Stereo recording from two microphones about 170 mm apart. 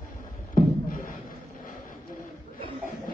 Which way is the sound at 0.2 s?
55° left (ahead or behind).